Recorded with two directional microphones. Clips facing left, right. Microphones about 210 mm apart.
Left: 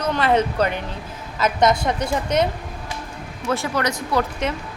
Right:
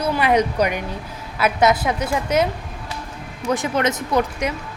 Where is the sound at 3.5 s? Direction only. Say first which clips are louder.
Right 2 dB; 20° right (ahead or behind).